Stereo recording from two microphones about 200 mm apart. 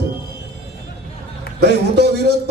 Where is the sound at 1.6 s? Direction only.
55° right (ahead or behind).